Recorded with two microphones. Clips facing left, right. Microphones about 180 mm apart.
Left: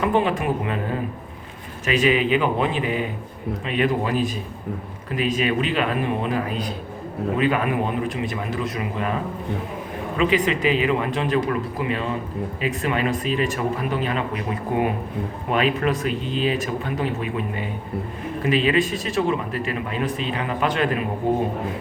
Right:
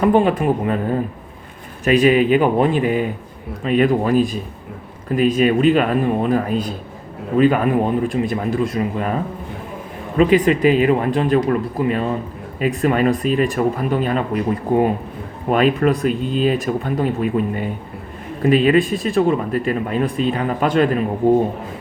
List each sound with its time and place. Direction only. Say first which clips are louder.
0.0 s speech: right 6 dB; 45° right (ahead or behind)
1.8 s speech: right 6 dB; 45° right (ahead or behind)
8.8 s speech: right 5 dB; 40° right (ahead or behind)
10.2 s speech: right 7 dB; 45° right (ahead or behind)